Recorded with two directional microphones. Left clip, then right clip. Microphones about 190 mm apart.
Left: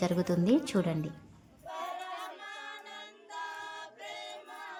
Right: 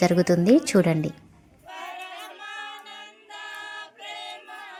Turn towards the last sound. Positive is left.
turn(degrees=45)  # may be behind; listen again after turning